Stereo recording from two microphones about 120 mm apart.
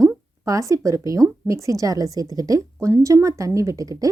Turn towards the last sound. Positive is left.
turn(degrees=-30)  # may be behind; listen again after turning